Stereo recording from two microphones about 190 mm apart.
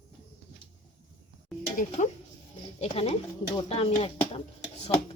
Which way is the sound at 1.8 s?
40° left (ahead or behind).